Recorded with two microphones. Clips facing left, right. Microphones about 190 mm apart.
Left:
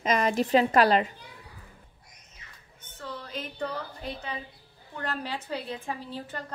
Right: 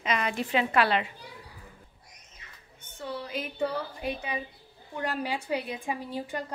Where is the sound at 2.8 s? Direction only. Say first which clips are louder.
Right 3 dB; 10° right (ahead or behind).